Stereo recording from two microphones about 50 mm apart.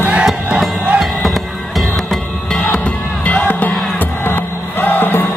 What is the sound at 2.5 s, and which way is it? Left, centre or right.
Music, left.